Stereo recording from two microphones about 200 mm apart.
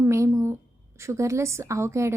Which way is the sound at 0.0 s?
15° right (ahead or behind).